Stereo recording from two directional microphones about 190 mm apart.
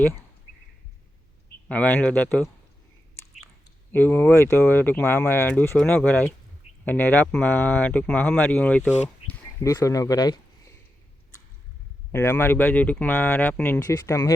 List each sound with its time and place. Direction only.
0.0 s speech: 15° left (ahead or behind)
1.6 s speech: 5° left (ahead or behind)
3.9 s speech: 10° left (ahead or behind)
12.1 s speech: 10° left (ahead or behind)